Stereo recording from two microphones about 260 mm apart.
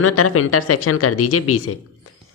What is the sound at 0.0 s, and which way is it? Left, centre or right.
Speech, left.